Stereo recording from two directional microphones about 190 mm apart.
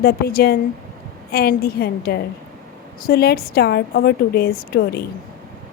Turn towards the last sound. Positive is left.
turn(degrees=55)  # may be behind; listen again after turning